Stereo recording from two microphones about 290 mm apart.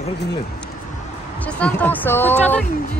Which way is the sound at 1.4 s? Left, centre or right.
Centre.